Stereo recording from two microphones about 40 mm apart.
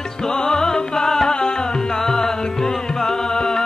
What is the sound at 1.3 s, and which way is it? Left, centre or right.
Music, centre.